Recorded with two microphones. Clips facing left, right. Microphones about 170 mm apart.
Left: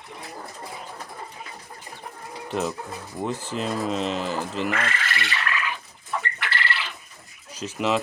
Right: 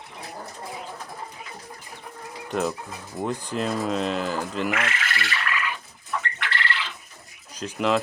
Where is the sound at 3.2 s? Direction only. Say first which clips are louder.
Right 1 dB; centre (ahead or behind).